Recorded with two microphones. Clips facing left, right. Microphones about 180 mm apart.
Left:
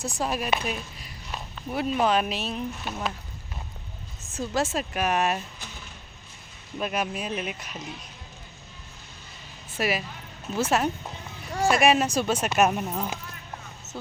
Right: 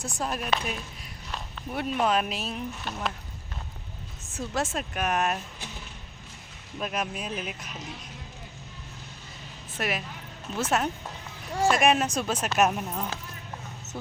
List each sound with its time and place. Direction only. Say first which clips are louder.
0.2 s speech: left 2 dB; 5° left (ahead or behind)
4.4 s speech: left 3 dB; 5° left (ahead or behind)
6.7 s speech: left 3 dB; centre (ahead or behind)
9.7 s speech: left 4 dB; 5° left (ahead or behind)
13.9 s speech: even; 15° right (ahead or behind)